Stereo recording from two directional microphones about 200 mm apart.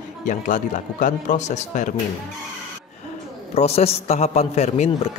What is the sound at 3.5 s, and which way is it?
A man's voice, 30° left (ahead or behind).